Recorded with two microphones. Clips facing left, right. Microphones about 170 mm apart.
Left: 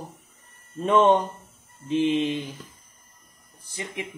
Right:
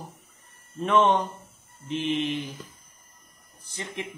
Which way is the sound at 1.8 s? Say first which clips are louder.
Left 5 dB; 15° left (ahead or behind).